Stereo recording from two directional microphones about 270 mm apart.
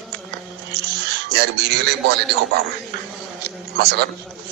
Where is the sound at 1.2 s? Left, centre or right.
Right.